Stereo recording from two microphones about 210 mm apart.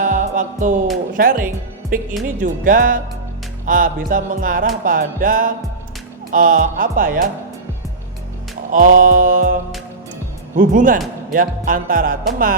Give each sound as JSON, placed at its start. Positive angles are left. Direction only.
{"t": 0.0, "sound": "music", "side_deg": -40}
{"t": 1.1, "sound": "speech", "side_deg": -40}
{"t": 8.7, "sound": "speech", "side_deg": -40}